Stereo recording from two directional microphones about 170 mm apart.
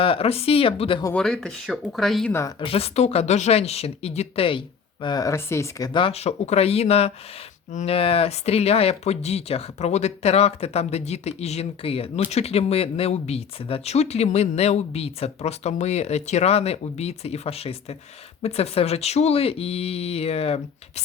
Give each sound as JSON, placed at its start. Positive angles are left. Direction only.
{"t": 0.0, "sound": "speech", "side_deg": 35}
{"t": 1.1, "sound": "speech", "side_deg": 5}
{"t": 2.6, "sound": "speech", "side_deg": 35}